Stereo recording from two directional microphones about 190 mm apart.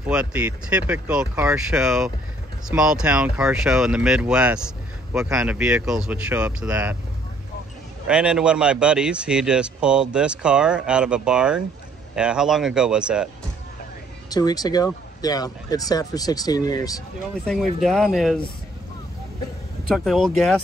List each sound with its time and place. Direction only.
0.1 s speech: 5° right (ahead or behind)
8.1 s speech: 5° right (ahead or behind)
14.3 s speech: 20° left (ahead or behind)
17.5 s speech: centre (ahead or behind)
19.9 s speech: centre (ahead or behind)